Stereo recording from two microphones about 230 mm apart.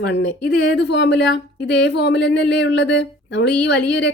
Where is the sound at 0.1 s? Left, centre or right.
Left.